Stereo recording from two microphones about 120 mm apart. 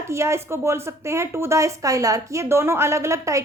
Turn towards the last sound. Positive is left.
turn(degrees=-25)  # may be behind; listen again after turning